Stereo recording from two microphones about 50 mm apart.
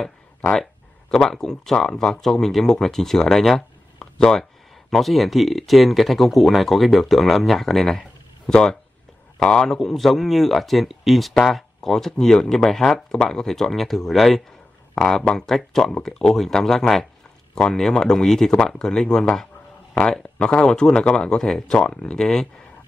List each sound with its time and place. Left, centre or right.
1.1 s speech: centre